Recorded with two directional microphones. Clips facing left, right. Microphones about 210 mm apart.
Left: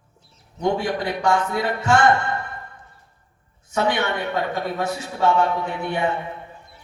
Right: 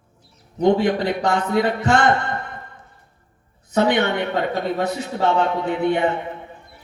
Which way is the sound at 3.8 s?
20° right (ahead or behind).